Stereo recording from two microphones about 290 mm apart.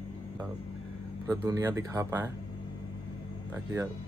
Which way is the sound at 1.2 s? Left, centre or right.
Centre.